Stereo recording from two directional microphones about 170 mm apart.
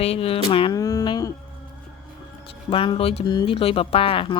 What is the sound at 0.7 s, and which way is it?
Speech, 20° left (ahead or behind).